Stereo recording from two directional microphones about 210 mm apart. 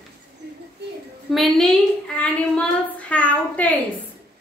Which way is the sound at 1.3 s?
Centre (ahead or behind).